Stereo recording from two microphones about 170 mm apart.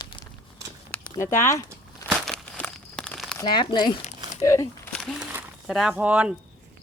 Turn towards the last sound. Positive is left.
turn(degrees=-5)  # may be behind; listen again after turning